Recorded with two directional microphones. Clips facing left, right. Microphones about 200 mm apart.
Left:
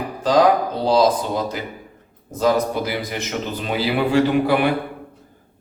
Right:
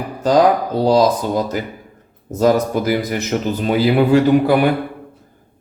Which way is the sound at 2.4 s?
45° right (ahead or behind).